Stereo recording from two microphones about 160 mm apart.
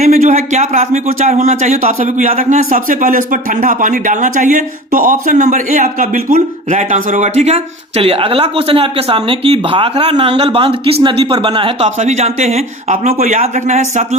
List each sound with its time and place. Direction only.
0.0 s speech: 50° right (ahead or behind)